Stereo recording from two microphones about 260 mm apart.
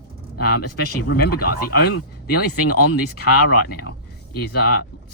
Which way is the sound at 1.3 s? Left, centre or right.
Left.